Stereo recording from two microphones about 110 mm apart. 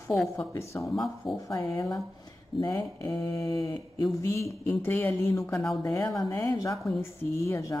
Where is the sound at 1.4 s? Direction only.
30° left (ahead or behind).